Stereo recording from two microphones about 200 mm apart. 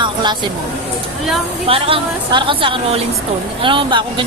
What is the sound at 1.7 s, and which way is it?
Speech, 25° right (ahead or behind).